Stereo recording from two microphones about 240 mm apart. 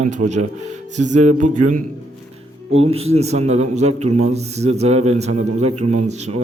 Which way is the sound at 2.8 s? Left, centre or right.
Right.